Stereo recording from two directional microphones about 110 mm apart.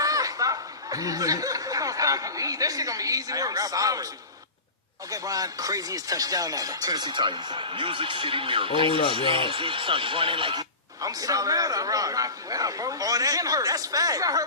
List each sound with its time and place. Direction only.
0.0 s speech: 35° right (ahead or behind)
5.1 s speech: 35° right (ahead or behind); by 10.6 s 50° right (ahead or behind)
10.6 s a man's voice: 35° right (ahead or behind)